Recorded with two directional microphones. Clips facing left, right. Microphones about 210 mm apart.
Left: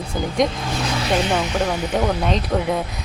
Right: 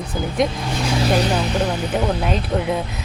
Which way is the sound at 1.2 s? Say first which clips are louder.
Right 1 dB; 35° right (ahead or behind).